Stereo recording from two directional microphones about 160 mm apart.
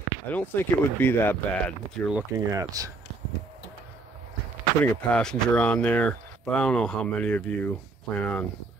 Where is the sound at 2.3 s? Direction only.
20° right (ahead or behind).